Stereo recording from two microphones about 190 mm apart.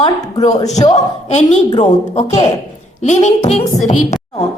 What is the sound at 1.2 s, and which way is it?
A woman's voice, 35° left (ahead or behind).